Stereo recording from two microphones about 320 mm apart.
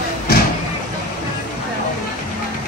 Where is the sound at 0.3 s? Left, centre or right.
Left.